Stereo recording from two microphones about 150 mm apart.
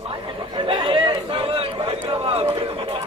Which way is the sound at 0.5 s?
35° right (ahead or behind).